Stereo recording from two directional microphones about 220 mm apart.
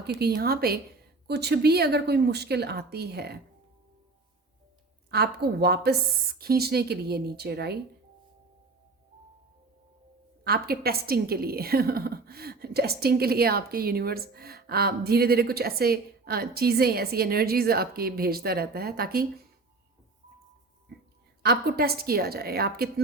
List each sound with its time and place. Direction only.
0.2 s a woman's voice: 45° right (ahead or behind)
5.1 s a woman's voice: 45° right (ahead or behind)
10.4 s a woman's voice: 45° right (ahead or behind)
21.4 s a woman's voice: 45° right (ahead or behind)